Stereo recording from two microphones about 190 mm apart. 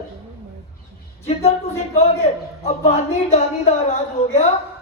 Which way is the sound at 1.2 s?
30° left (ahead or behind).